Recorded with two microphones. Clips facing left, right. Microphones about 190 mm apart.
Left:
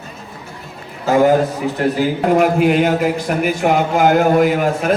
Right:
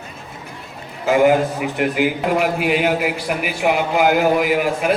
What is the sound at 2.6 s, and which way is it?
Speech, 5° right (ahead or behind).